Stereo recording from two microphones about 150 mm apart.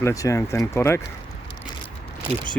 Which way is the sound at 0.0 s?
20° left (ahead or behind).